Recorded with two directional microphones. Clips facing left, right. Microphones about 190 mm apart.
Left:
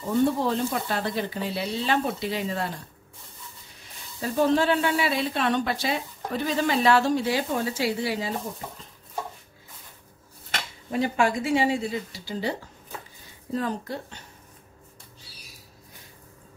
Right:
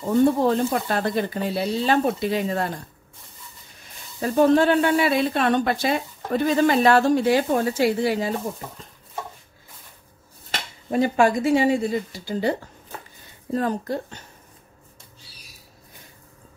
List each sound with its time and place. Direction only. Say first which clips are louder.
0.4 s speech: right 5 dB; 50° right (ahead or behind)
4.2 s speech: right 5 dB; 50° right (ahead or behind)
10.9 s speech: right 5 dB; 45° right (ahead or behind)